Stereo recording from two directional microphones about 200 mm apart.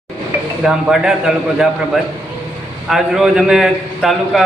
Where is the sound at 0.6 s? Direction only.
5° right (ahead or behind).